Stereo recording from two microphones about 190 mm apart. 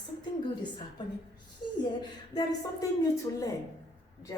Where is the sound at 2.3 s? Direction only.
20° left (ahead or behind).